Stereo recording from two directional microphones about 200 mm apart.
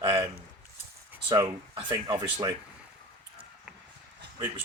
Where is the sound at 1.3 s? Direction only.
20° right (ahead or behind).